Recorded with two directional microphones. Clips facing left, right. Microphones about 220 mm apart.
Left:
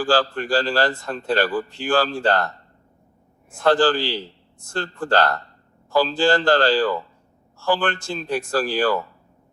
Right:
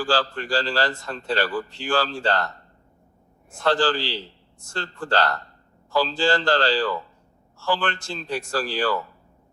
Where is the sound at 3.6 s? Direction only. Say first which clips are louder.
Left 4 dB; 50° left (ahead or behind).